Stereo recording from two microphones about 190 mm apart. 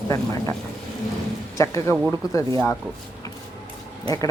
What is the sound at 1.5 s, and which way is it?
Speech, 15° left (ahead or behind).